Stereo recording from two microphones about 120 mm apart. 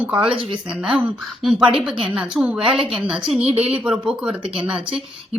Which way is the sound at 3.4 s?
55° right (ahead or behind).